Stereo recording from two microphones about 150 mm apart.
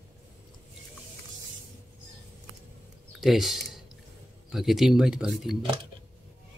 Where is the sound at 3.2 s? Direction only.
Centre (ahead or behind).